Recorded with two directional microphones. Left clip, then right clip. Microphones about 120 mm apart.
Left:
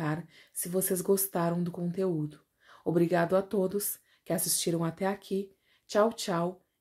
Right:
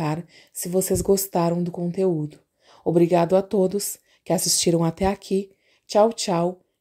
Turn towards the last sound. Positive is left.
turn(degrees=-50)  # may be behind; listen again after turning